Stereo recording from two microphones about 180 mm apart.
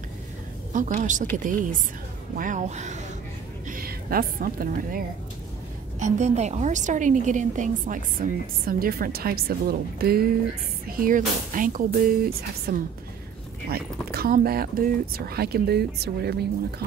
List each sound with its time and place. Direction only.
0.7 s a woman's voice: 45° right (ahead or behind)
3.7 s a woman's voice: 55° right (ahead or behind)